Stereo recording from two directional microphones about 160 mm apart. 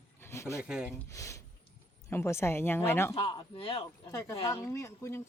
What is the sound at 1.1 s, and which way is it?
A man's voice, 20° left (ahead or behind).